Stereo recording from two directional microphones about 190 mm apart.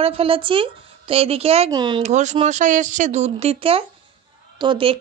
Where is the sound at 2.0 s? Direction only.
40° right (ahead or behind).